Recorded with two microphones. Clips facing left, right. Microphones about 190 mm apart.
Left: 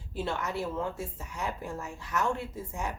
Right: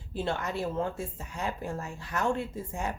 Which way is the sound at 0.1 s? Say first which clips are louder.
Right 1 dB; 30° right (ahead or behind).